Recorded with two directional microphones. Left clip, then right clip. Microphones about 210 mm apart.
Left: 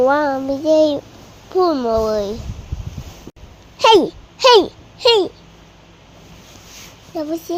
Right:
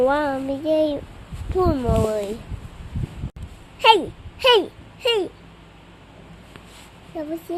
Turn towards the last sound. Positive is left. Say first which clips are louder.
# left 6 dB
turn(degrees=20)  # may be behind; listen again after turning